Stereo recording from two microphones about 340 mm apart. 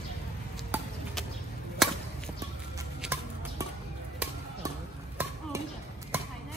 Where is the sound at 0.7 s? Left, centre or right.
Centre.